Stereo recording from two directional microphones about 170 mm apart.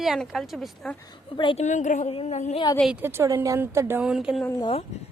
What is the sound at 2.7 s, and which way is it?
Speech, centre (ahead or behind).